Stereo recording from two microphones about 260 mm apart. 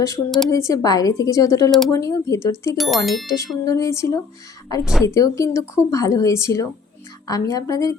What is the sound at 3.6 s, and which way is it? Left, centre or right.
Speech, centre.